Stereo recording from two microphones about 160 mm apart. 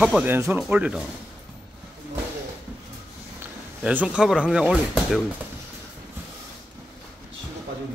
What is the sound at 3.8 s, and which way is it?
Speech, 10° right (ahead or behind).